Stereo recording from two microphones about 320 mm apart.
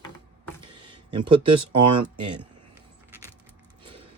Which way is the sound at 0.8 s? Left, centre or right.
Centre.